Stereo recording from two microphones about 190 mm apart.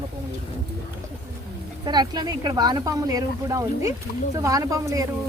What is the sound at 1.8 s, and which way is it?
Speech, 20° right (ahead or behind).